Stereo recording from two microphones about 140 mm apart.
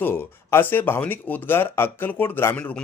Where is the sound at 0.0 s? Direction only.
15° left (ahead or behind).